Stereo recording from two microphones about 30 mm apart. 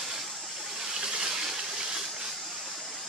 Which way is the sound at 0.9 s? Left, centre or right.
Right.